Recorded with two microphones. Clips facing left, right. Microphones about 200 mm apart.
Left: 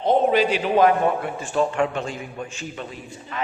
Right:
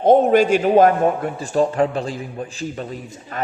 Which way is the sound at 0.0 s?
50° right (ahead or behind).